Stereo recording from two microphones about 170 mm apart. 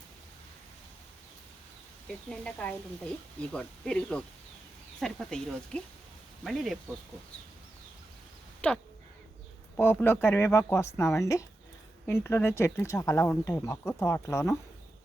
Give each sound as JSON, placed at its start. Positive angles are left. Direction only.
{"t": 2.0, "sound": "speech", "side_deg": 5}
{"t": 8.6, "sound": "speech", "side_deg": 5}